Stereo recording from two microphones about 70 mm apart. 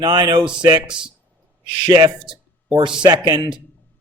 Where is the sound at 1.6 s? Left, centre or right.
Right.